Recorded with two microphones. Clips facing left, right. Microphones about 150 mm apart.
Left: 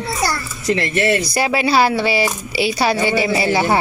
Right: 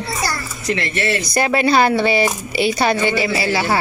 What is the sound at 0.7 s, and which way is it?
Speech, 45° left (ahead or behind).